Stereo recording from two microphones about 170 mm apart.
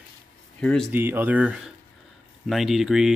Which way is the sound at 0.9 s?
10° right (ahead or behind).